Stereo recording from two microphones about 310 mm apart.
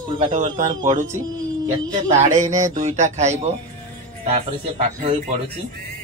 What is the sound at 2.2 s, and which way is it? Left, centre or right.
Speech, right.